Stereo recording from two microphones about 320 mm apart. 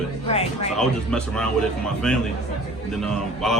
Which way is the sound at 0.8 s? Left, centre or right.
Centre.